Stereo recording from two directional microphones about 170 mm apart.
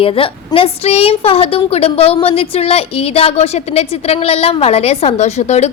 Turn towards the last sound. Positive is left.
turn(degrees=40)  # may be behind; listen again after turning